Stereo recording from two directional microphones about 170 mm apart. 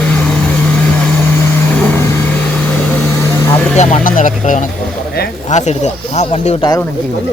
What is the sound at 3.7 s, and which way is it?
Speech, 45° left (ahead or behind).